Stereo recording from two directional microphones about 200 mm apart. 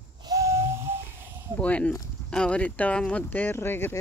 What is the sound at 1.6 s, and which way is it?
Speech, 5° left (ahead or behind).